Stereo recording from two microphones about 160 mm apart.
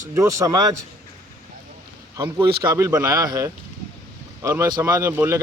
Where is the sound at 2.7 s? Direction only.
15° right (ahead or behind).